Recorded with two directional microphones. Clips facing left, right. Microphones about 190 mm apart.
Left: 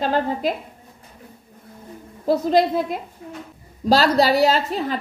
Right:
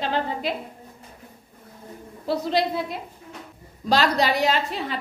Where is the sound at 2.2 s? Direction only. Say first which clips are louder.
Left 6 dB; 45° left (ahead or behind).